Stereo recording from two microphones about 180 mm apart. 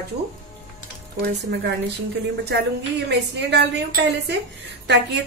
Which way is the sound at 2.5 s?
65° right (ahead or behind).